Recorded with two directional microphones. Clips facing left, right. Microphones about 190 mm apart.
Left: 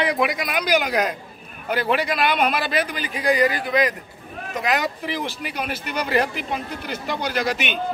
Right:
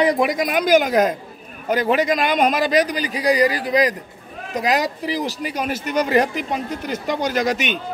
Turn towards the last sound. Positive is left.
turn(degrees=-45)  # may be behind; listen again after turning